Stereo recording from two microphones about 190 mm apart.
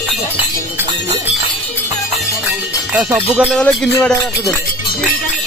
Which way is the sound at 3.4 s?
Centre (ahead or behind).